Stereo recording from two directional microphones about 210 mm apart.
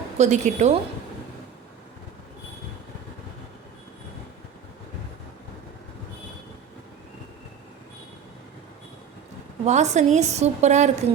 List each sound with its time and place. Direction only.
0.2 s a woman's voice: 35° right (ahead or behind)
9.6 s a woman's voice: 35° right (ahead or behind)